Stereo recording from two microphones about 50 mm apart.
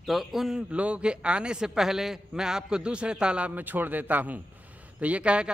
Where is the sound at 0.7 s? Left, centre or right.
Right.